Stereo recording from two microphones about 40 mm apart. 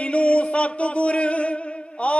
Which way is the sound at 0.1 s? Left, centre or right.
Left.